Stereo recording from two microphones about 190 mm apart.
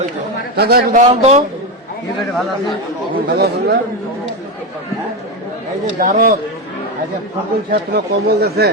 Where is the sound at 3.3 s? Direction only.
60° right (ahead or behind).